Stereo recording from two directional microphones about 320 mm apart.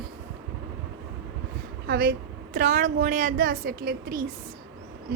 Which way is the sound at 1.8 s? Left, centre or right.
Right.